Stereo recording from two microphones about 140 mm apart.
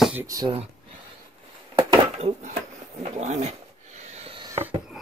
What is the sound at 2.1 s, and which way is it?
Speech, 50° right (ahead or behind).